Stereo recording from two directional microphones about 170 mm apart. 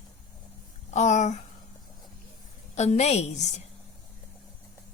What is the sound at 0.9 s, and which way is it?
Speech, 40° left (ahead or behind).